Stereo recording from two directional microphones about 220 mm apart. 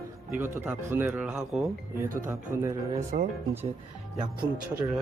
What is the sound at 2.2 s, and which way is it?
Speech, 10° right (ahead or behind).